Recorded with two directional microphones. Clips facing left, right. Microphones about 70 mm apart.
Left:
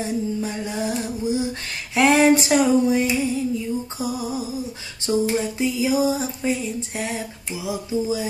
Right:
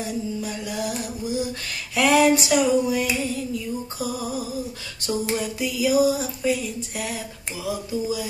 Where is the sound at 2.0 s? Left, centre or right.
Left.